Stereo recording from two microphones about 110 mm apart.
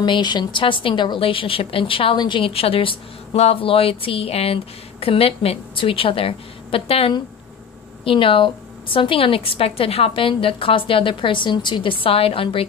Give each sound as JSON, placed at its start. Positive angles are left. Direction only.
{"t": 0.0, "sound": "a woman's voice", "side_deg": 45}